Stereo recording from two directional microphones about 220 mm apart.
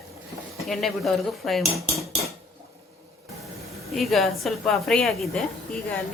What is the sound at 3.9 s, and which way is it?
A woman's voice, centre (ahead or behind).